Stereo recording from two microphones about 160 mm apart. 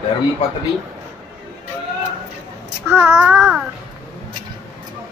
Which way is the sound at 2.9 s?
10° right (ahead or behind).